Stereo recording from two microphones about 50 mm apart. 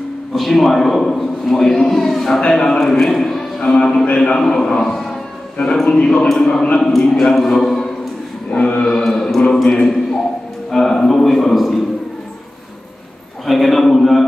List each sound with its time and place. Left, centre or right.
0.3 s a man's voice: centre
4.4 s a man's voice: centre
6.5 s a man's voice: centre
6.9 s a man's voice: centre
8.5 s a man's voice: centre
9.0 s a man's voice: centre
13.5 s a man's voice: centre